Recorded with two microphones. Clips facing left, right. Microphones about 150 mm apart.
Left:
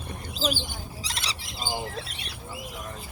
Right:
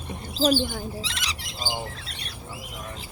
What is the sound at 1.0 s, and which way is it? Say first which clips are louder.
Bird: even; 35° left (ahead or behind).